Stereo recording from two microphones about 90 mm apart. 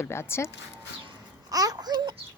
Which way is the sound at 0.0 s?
30° left (ahead or behind).